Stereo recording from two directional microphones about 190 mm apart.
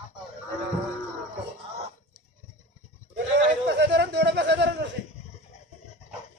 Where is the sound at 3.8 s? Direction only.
65° right (ahead or behind).